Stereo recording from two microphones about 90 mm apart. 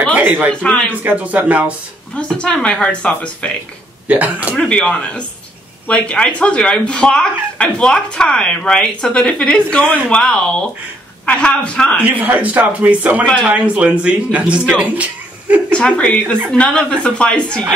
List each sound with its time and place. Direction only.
0.1 s speech: 20° right (ahead or behind)
0.5 s speech: 10° left (ahead or behind)
1.0 s speech: 15° right (ahead or behind)
2.1 s speech: 10° left (ahead or behind)
4.1 s speech: 15° right (ahead or behind)
4.6 s speech: 10° left (ahead or behind)
12.0 s speech: 15° right (ahead or behind)
15.7 s speech: 10° left (ahead or behind)